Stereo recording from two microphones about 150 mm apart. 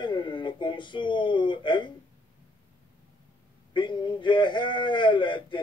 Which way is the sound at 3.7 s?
30° left (ahead or behind).